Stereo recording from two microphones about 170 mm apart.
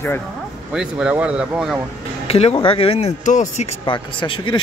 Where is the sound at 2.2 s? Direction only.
35° left (ahead or behind).